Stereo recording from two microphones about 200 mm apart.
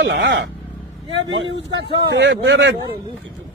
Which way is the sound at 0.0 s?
65° right (ahead or behind).